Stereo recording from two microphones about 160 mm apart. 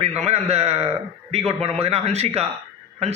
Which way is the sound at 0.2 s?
40° right (ahead or behind).